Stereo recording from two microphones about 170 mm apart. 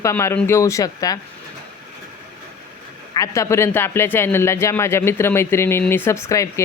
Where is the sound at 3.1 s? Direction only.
20° left (ahead or behind).